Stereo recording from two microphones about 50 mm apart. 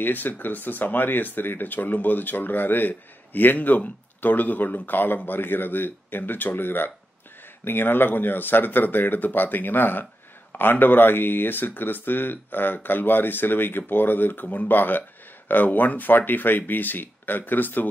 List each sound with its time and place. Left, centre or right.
0.0 s speech: left